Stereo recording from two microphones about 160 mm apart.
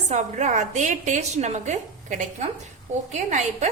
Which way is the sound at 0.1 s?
45° right (ahead or behind).